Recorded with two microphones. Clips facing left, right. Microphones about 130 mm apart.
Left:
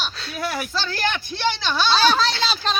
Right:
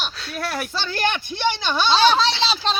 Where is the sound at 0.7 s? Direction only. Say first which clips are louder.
Right 1 dB; 20° right (ahead or behind).